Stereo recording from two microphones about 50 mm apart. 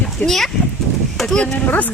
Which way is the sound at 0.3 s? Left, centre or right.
Centre.